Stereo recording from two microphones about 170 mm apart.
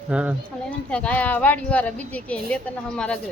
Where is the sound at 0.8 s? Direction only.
5° left (ahead or behind).